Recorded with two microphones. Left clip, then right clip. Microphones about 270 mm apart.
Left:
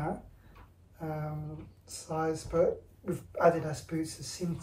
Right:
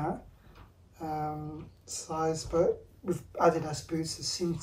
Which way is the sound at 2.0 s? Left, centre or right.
Centre.